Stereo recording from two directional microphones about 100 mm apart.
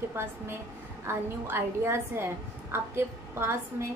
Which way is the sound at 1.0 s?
25° right (ahead or behind).